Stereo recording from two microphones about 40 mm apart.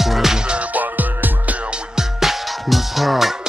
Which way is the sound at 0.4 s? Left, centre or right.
Right.